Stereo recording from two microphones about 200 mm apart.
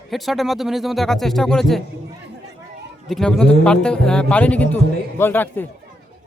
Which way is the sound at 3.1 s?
Centre (ahead or behind).